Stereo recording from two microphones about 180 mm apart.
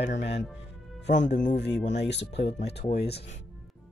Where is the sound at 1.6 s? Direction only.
70° left (ahead or behind).